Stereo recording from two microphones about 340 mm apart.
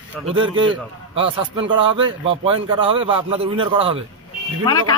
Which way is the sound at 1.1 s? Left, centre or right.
Centre.